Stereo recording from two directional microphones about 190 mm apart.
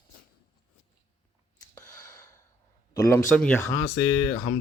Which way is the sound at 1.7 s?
20° left (ahead or behind).